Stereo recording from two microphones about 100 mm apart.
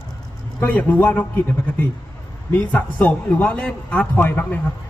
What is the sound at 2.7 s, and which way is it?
A man's voice, 15° left (ahead or behind).